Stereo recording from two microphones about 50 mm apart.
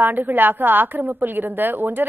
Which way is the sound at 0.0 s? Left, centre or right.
Right.